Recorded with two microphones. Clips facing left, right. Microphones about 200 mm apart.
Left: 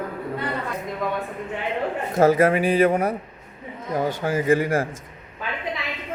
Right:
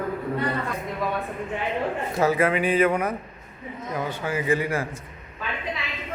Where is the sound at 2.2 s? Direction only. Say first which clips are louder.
Left 5 dB; 40° left (ahead or behind).